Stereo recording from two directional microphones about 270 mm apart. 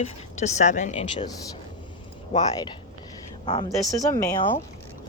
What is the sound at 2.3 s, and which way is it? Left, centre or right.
Speech, left.